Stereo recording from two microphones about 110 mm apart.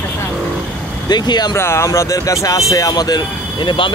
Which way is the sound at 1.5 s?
25° left (ahead or behind).